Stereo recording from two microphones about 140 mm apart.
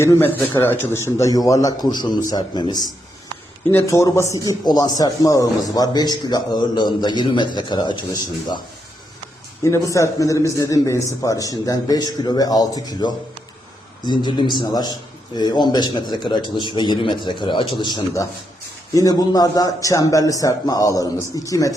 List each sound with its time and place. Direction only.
0.0 s a man's voice: 15° left (ahead or behind); by 2.9 s 30° left (ahead or behind)
3.7 s a man's voice: 20° left (ahead or behind)
9.6 s a man's voice: 20° left (ahead or behind)